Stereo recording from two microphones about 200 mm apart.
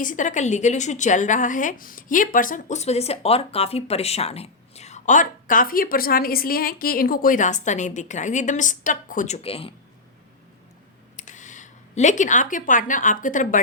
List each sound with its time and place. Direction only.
0.0 s a woman's voice: 40° left (ahead or behind)
11.2 s speech: 40° left (ahead or behind)